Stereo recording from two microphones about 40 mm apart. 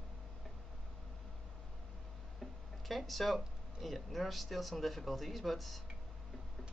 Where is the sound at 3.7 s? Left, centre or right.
Centre.